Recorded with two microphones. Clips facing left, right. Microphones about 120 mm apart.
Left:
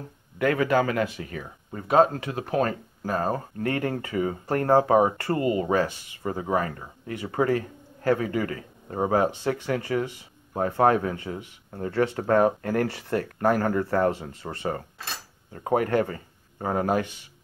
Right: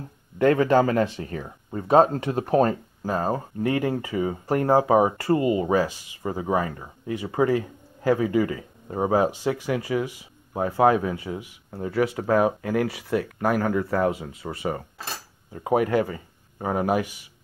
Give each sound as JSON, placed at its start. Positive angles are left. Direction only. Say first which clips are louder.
{"t": 0.4, "sound": "speech", "louder": "right 4 dB", "side_deg": -30}
{"t": 3.0, "sound": "speech", "louder": "even", "side_deg": -15}